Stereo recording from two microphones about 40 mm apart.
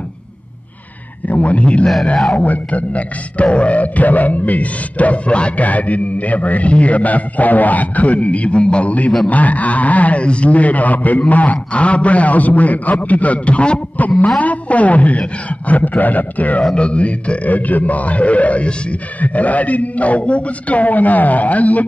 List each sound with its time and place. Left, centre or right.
1.2 s a man's voice: left
16.7 s speech: left